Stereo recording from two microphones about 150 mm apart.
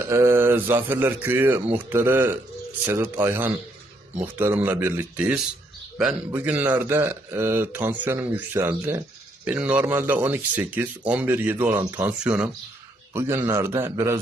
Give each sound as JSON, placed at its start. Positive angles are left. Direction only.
{"t": 0.0, "sound": "a man's voice", "side_deg": -20}